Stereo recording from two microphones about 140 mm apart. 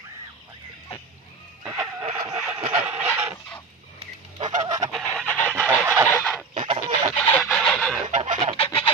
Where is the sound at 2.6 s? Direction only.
45° right (ahead or behind).